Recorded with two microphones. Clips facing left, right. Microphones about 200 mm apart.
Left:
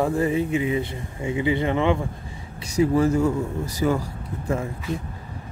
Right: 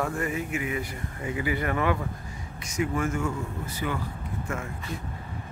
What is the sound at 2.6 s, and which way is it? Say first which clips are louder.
A man's voice: left 9 dB; 35° left (ahead or behind).